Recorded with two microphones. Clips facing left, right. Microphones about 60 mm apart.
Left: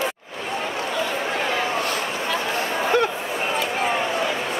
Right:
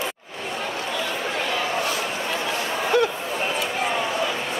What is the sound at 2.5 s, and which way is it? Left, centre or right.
Chatter, left.